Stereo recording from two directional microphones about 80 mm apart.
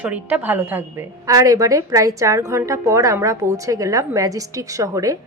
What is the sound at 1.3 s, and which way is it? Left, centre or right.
A woman's voice, right.